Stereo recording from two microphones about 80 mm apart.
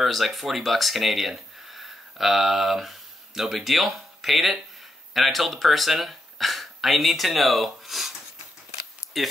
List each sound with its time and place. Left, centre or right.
0.0 s speech: centre
9.1 s speech: centre